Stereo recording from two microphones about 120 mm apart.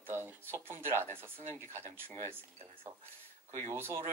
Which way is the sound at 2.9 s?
25° right (ahead or behind).